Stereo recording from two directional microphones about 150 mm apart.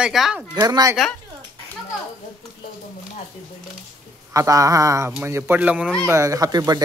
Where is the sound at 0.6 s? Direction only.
25° right (ahead or behind).